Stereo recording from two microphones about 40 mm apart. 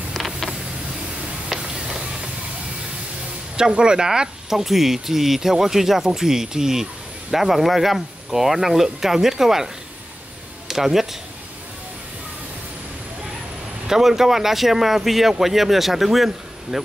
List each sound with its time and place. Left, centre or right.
0.1 s a sound: centre
1.5 s a sound: centre
3.5 s speech: right
4.5 s speech: centre
10.7 s speech: centre
13.8 s speech: centre